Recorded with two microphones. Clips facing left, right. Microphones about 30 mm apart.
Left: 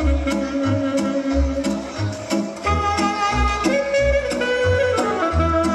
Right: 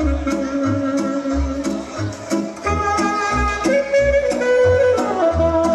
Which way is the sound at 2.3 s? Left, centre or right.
Left.